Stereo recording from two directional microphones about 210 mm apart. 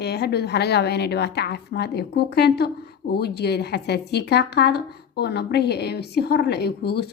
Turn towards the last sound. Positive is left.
turn(degrees=50)  # may be behind; listen again after turning